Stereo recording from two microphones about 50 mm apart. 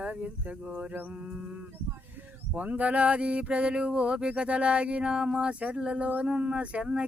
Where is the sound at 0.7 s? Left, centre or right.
Right.